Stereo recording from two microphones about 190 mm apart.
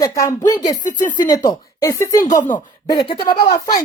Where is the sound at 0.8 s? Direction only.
40° left (ahead or behind).